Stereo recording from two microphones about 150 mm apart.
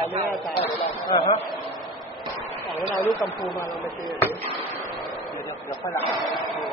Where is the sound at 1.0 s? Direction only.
30° left (ahead or behind).